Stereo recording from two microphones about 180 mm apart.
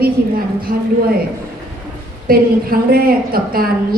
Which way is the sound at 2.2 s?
55° right (ahead or behind).